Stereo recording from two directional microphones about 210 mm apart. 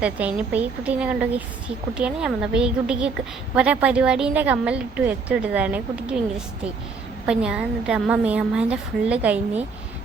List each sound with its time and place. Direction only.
0.0 s a woman's voice: 5° right (ahead or behind)